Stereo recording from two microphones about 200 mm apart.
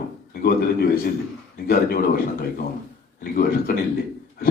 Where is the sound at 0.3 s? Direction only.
50° left (ahead or behind).